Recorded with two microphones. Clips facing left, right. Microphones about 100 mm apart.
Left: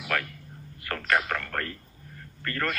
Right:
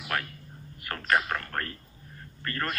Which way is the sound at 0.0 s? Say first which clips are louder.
Left 2 dB; 25° right (ahead or behind).